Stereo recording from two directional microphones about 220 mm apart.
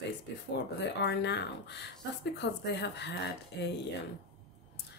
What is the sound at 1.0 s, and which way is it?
Speech, 50° left (ahead or behind).